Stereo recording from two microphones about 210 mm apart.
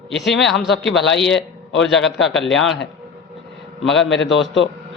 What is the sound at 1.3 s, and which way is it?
Speech, 60° left (ahead or behind).